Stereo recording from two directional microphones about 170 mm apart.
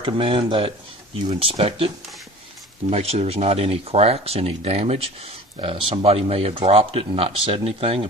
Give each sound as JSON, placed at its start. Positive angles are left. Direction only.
{"t": 0.0, "sound": "speech", "side_deg": -30}
{"t": 2.9, "sound": "speech", "side_deg": -40}